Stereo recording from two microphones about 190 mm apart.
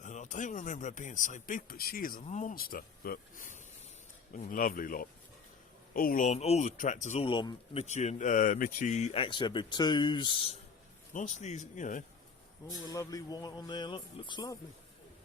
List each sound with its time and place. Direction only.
0.0 s a man's voice: 40° left (ahead or behind)
7.3 s speech: 25° left (ahead or behind)
11.1 s a man's voice: 40° left (ahead or behind)
12.8 s speech: 20° left (ahead or behind)